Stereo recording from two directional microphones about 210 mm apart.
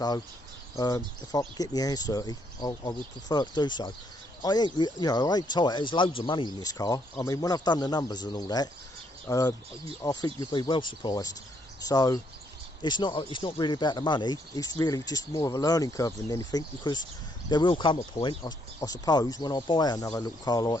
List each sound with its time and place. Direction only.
0.8 s speech: 20° left (ahead or behind)